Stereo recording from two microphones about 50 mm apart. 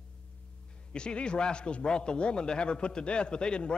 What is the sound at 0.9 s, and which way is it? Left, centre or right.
A man's voice, centre.